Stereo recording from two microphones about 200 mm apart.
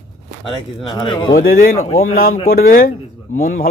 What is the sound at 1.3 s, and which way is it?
A man's voice, 45° left (ahead or behind).